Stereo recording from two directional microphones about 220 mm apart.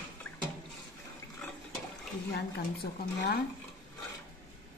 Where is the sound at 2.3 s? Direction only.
45° left (ahead or behind).